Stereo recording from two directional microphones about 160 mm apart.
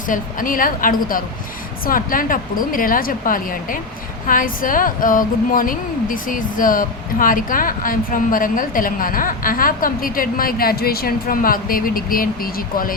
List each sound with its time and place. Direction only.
0.1 s speech: 60° left (ahead or behind)